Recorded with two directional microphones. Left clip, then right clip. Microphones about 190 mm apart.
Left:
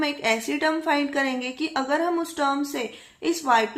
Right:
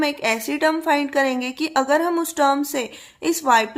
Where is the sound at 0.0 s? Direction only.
30° right (ahead or behind).